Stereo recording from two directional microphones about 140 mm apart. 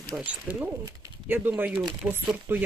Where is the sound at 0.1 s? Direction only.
10° right (ahead or behind).